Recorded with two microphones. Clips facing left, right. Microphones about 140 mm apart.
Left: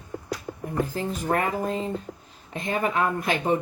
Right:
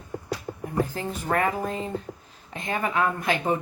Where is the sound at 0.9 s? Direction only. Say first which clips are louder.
Left 1 dB; 35° left (ahead or behind).